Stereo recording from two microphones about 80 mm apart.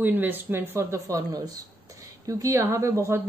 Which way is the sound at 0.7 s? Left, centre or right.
Right.